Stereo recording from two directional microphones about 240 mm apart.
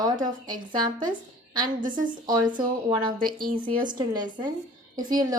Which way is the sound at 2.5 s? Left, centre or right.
Centre.